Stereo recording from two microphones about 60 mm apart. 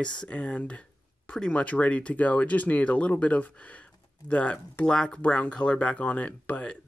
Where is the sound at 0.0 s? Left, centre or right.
Centre.